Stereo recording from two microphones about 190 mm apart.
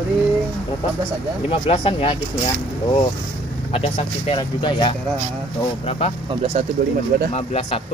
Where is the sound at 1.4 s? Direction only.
30° left (ahead or behind).